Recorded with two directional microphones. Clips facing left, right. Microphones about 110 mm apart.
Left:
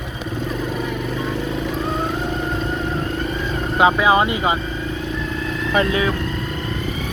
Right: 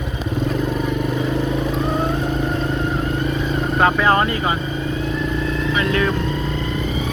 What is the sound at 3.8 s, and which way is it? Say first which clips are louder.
Speech: left 2 dB; 10° left (ahead or behind).